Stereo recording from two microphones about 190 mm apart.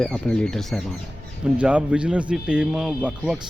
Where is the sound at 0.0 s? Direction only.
5° left (ahead or behind).